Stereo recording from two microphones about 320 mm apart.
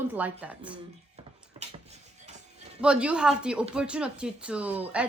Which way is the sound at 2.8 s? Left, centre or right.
Centre.